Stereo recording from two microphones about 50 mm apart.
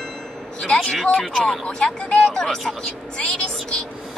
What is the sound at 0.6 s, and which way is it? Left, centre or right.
Speech, centre.